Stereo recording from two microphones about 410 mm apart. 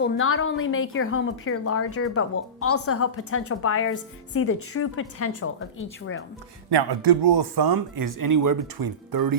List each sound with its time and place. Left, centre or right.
0.0 s a woman's voice: left
6.7 s speech: right